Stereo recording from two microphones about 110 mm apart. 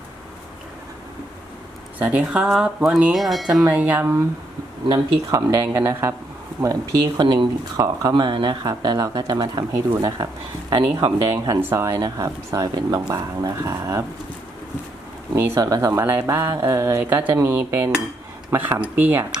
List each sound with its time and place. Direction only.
2.0 s speech: 10° right (ahead or behind)
5.3 s speech: 25° right (ahead or behind)
11.4 s speech: 25° right (ahead or behind)
15.5 s speech: 30° right (ahead or behind)